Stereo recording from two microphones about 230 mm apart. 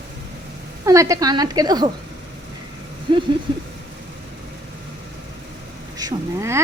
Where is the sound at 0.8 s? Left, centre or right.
Centre.